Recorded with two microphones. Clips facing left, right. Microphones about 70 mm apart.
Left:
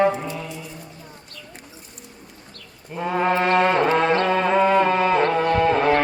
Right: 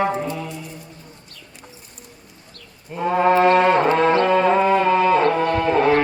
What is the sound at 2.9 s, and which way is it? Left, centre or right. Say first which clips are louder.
Music: right 3 dB; centre.